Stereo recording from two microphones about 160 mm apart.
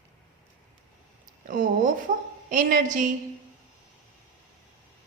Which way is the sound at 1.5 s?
55° right (ahead or behind).